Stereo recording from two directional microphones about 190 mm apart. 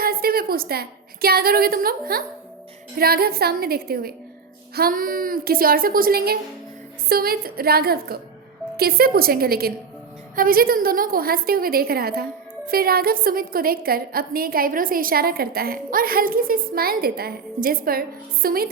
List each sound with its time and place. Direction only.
0.0 s a woman's voice: 50° right (ahead or behind)